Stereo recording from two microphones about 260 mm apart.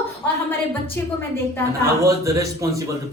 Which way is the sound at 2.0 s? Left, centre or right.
Centre.